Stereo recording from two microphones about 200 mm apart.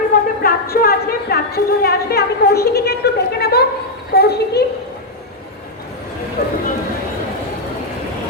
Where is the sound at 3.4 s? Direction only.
55° left (ahead or behind).